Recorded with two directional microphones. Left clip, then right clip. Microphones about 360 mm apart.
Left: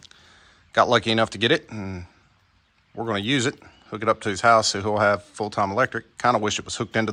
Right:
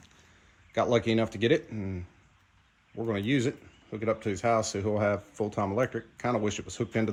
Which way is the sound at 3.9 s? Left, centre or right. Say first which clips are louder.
Left 8 dB; left.